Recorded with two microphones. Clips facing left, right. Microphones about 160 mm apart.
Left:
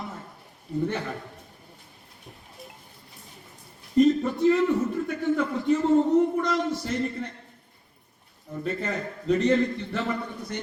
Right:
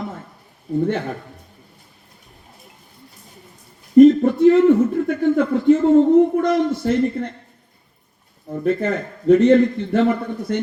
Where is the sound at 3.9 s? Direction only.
55° right (ahead or behind).